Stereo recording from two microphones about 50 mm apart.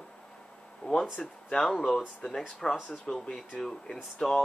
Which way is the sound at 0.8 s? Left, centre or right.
Left.